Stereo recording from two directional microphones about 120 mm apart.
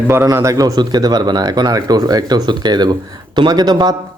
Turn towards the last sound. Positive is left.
turn(degrees=-35)  # may be behind; listen again after turning